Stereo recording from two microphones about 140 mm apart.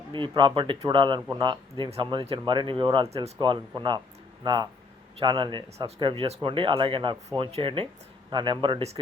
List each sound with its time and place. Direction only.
0.1 s a man's voice: 35° right (ahead or behind)